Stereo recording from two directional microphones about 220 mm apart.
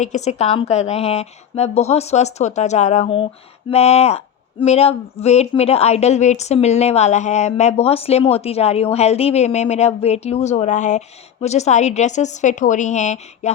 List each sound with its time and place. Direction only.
0.0 s speech: 30° left (ahead or behind)